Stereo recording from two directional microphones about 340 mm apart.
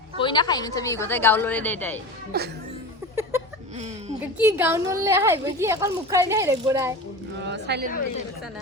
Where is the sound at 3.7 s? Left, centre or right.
Centre.